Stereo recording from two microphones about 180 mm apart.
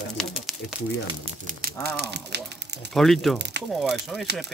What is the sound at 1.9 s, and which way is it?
Speech, 70° right (ahead or behind).